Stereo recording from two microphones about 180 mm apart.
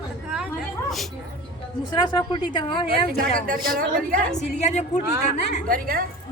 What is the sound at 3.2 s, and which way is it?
Speech, 50° right (ahead or behind).